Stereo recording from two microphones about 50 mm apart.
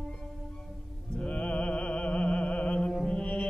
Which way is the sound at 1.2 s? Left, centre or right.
Left.